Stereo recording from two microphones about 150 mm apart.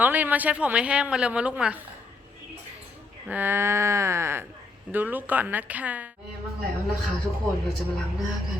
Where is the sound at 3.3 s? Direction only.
15° right (ahead or behind).